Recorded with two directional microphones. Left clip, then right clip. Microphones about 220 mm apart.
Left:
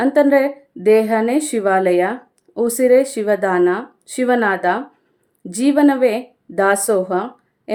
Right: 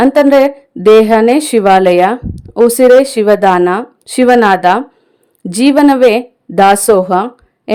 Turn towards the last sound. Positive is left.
turn(degrees=-40)  # may be behind; listen again after turning